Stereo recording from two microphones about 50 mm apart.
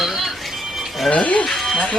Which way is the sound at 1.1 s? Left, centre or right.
Left.